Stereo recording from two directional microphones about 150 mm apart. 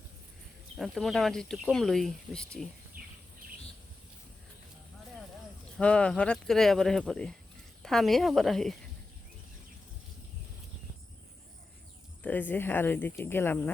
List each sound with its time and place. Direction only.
0.8 s speech: centre (ahead or behind)
2.9 s bird: 70° right (ahead or behind)
5.7 s speech: 5° left (ahead or behind)
12.2 s speech: 10° left (ahead or behind)